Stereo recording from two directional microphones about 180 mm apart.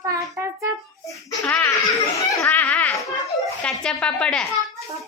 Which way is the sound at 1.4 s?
10° left (ahead or behind).